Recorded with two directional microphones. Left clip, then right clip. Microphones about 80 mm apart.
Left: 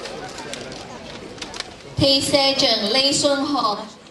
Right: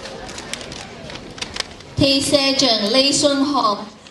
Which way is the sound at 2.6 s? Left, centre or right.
Right.